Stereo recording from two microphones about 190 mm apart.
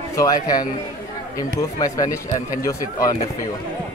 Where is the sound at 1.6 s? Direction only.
15° left (ahead or behind).